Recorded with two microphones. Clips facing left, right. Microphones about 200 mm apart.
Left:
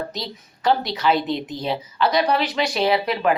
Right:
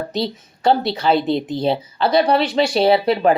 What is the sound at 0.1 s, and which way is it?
A woman's voice, 30° right (ahead or behind).